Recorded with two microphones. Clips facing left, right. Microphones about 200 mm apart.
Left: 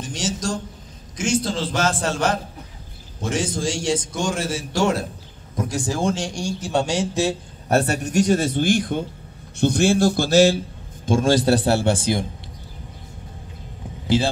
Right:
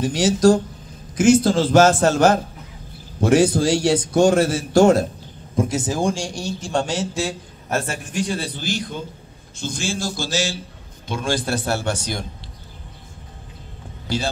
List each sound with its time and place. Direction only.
0.0 s a man's voice: 60° right (ahead or behind); by 2.4 s 45° right (ahead or behind)
3.2 s a man's voice: 60° right (ahead or behind)
5.6 s speech: 20° right (ahead or behind); by 6.7 s 5° right (ahead or behind)
6.7 s speech: 10° left (ahead or behind)
7.6 s a man's voice: 35° left (ahead or behind); by 10.6 s 55° left (ahead or behind)
11.1 s a man's voice: 45° left (ahead or behind); by 12.3 s 25° left (ahead or behind)